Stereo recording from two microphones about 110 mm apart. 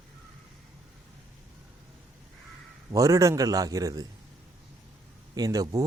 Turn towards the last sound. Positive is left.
turn(degrees=-35)  # may be behind; listen again after turning